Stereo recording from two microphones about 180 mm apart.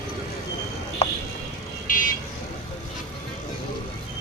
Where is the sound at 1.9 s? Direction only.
50° left (ahead or behind).